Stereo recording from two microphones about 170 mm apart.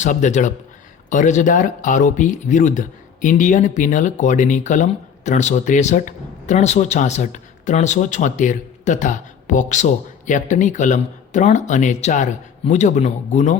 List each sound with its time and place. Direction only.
0.0 s speech: 45° left (ahead or behind)